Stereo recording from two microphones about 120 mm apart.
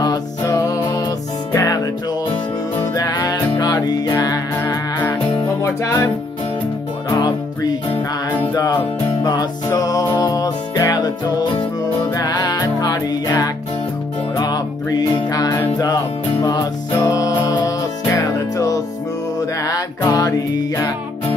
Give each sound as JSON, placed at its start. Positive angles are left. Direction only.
{"t": 0.0, "sound": "music", "side_deg": 30}
{"t": 7.1, "sound": "music", "side_deg": 30}
{"t": 9.2, "sound": "music", "side_deg": 35}